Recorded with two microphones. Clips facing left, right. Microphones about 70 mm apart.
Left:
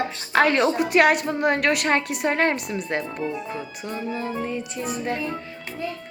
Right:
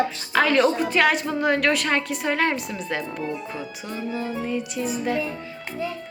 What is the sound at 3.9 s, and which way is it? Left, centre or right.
Music, left.